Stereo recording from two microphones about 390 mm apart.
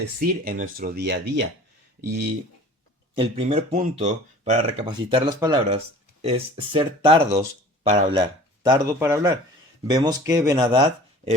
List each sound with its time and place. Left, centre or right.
0.4 s speech: right
3.2 s speech: centre